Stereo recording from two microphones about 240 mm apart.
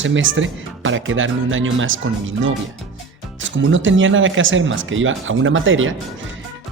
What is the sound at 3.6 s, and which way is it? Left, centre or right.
Speech, right.